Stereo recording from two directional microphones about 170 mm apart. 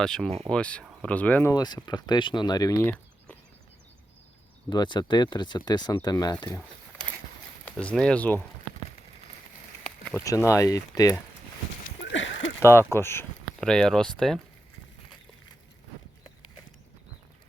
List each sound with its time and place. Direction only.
0.0 s speech: 5° left (ahead or behind)
1.5 s speech: 25° left (ahead or behind)
4.7 s speech: 25° left (ahead or behind)
7.6 s speech: 5° left (ahead or behind)
10.0 s a sound: 10° left (ahead or behind)
10.2 s speech: 20° left (ahead or behind)
12.0 s a sound: 90° left
12.5 s speech: 15° left (ahead or behind)